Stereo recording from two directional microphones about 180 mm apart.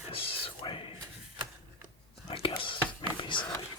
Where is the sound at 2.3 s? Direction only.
30° left (ahead or behind).